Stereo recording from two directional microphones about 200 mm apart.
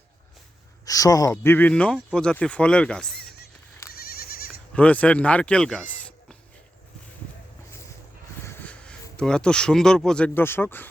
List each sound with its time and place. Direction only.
0.9 s speech: 20° left (ahead or behind)
3.9 s goat: 50° left (ahead or behind)
4.7 s speech: 5° left (ahead or behind)
8.4 s speech: 10° left (ahead or behind)